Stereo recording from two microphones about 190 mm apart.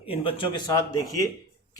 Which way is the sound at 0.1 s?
30° left (ahead or behind).